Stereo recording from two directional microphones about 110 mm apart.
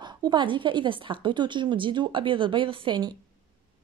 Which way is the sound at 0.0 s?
45° right (ahead or behind).